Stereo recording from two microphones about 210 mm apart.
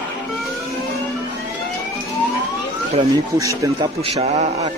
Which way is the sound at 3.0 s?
15° right (ahead or behind).